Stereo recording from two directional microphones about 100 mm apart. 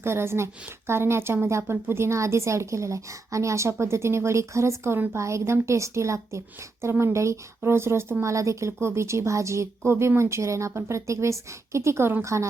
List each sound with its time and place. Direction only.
0.0 s a woman's voice: 25° right (ahead or behind)